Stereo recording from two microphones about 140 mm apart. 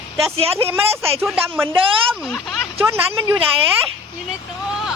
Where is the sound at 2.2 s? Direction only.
Centre (ahead or behind).